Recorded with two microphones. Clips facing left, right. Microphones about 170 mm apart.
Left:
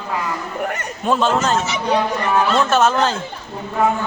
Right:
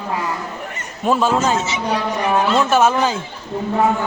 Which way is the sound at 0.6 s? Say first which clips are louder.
Left 7 dB; 65° left (ahead or behind).